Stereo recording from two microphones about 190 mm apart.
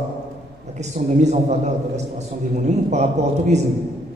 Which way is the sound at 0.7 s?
35° right (ahead or behind).